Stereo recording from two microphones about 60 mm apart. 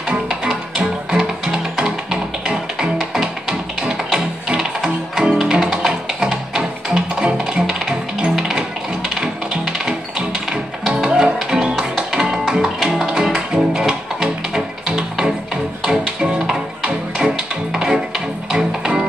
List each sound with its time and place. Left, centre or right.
0.1 s music: centre